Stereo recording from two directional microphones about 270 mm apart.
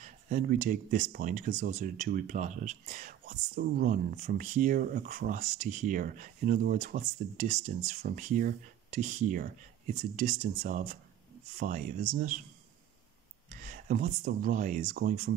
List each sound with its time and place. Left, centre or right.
0.0 s speech: right
13.5 s speech: right